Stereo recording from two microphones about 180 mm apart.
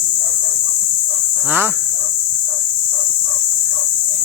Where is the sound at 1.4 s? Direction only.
10° right (ahead or behind).